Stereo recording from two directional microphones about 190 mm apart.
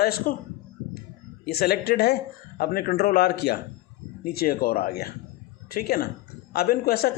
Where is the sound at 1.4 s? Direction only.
55° left (ahead or behind).